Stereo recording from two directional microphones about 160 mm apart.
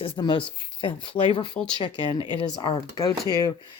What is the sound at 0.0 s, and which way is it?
Speech, 30° left (ahead or behind).